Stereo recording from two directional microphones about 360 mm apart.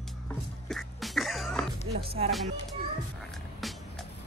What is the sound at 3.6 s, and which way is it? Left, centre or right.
Music, centre.